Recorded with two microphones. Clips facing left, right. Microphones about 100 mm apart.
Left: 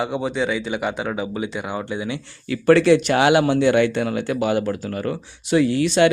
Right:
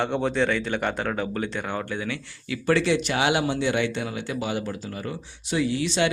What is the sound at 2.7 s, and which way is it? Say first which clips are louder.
Speech: left 8 dB; 55° left (ahead or behind).